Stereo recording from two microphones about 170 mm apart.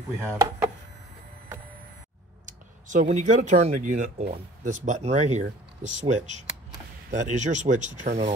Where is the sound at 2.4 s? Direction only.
50° right (ahead or behind).